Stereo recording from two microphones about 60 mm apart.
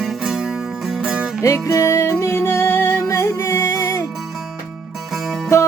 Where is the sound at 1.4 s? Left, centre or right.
Left.